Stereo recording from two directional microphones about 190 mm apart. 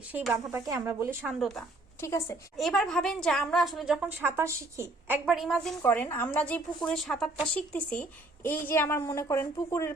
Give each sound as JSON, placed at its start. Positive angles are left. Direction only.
{"t": 0.1, "sound": "a woman's voice", "side_deg": 0}
{"t": 0.3, "sound": "a woman's voice", "side_deg": -15}
{"t": 1.3, "sound": "a woman's voice", "side_deg": 0}
{"t": 2.0, "sound": "a woman's voice", "side_deg": 15}
{"t": 2.6, "sound": "a woman's voice", "side_deg": 0}
{"t": 4.2, "sound": "a woman's voice", "side_deg": -15}
{"t": 5.2, "sound": "a woman's voice", "side_deg": 0}